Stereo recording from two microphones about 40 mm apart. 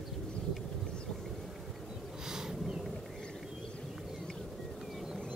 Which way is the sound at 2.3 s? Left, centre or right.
Centre.